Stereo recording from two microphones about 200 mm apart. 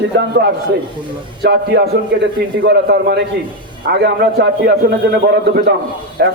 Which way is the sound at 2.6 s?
55° right (ahead or behind).